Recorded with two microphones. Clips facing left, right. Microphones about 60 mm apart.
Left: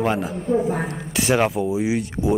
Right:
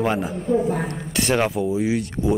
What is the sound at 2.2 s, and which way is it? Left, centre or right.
Speech, centre.